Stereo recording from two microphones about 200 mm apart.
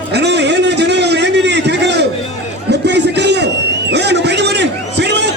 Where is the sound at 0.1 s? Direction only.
55° right (ahead or behind).